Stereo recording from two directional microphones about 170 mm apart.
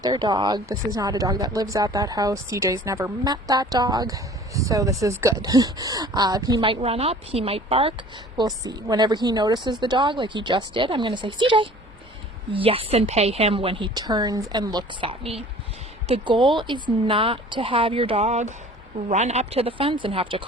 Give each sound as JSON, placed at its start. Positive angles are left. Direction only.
{"t": 0.0, "sound": "a woman's voice", "side_deg": -25}